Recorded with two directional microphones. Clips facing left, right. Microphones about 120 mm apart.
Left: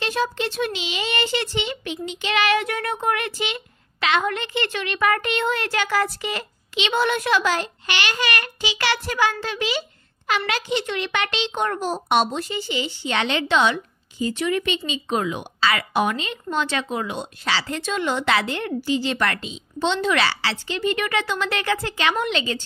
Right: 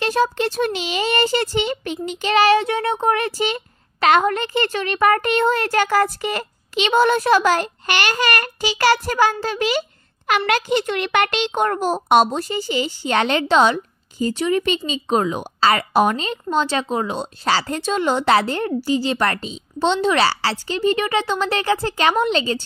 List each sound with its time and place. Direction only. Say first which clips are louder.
0.0 s a woman's voice: right 5 dB; 45° right (ahead or behind)